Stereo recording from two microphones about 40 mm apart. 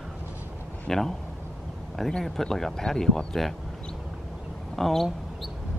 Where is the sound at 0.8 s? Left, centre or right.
Centre.